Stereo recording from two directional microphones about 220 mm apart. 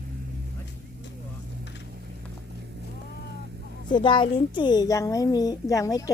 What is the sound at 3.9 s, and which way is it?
A woman's voice, 20° left (ahead or behind).